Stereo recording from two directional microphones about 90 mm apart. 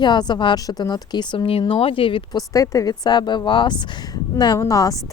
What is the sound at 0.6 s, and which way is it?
Speech, 45° left (ahead or behind).